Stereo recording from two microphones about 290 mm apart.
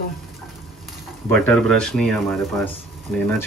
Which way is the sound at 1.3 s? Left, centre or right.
Centre.